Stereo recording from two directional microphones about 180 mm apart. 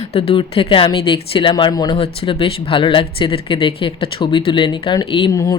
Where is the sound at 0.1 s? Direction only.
30° left (ahead or behind).